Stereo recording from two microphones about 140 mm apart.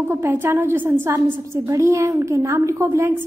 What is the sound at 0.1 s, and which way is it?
A woman's voice, 15° right (ahead or behind).